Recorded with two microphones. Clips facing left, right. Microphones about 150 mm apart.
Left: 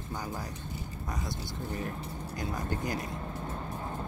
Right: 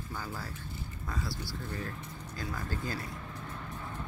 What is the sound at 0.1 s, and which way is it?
Speech, 20° left (ahead or behind).